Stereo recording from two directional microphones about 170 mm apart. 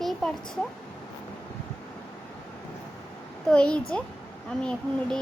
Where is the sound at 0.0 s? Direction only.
Centre (ahead or behind).